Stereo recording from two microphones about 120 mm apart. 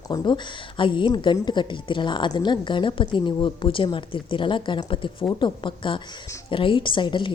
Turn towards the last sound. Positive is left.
turn(degrees=40)  # may be behind; listen again after turning